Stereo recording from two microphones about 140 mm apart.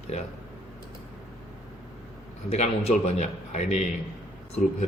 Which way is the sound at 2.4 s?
50° left (ahead or behind).